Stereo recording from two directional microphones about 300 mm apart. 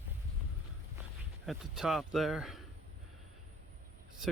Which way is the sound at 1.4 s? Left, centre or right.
Centre.